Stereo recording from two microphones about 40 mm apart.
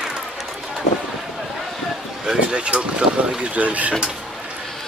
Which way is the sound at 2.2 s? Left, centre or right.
Right.